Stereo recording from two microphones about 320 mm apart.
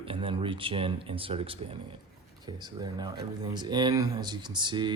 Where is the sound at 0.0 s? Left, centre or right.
Centre.